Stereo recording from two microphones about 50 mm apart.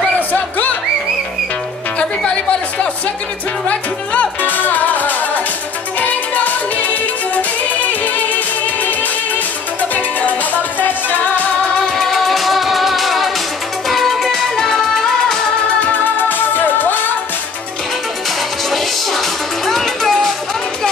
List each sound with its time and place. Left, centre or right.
2.0 s music: left
11.9 s music: centre
15.8 s music: left
18.7 s music: centre